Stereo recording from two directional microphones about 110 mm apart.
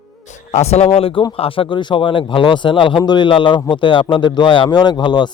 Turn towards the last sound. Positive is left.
turn(degrees=45)  # may be behind; listen again after turning